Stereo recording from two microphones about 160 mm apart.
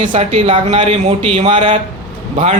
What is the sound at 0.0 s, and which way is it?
A man's voice, 35° right (ahead or behind).